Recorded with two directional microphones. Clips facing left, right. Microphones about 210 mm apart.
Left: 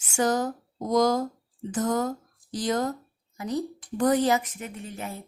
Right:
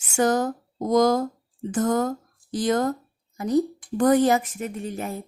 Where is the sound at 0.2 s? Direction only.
55° right (ahead or behind).